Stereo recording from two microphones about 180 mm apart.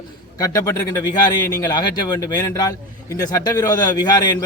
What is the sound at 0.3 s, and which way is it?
Speech, 20° left (ahead or behind).